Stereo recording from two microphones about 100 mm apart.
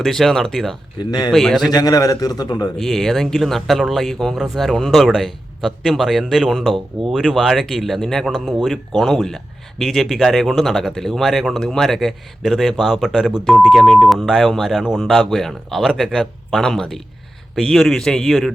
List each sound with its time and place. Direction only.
0.0 s speech: centre (ahead or behind)
0.9 s speech: 45° left (ahead or behind)
1.3 s speech: centre (ahead or behind)
1.7 s a man's voice: 40° left (ahead or behind)
2.7 s speech: centre (ahead or behind)